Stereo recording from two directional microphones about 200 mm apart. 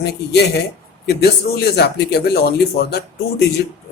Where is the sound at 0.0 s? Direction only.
55° left (ahead or behind).